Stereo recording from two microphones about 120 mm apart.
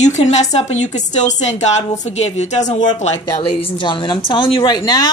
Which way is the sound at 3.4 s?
45° left (ahead or behind).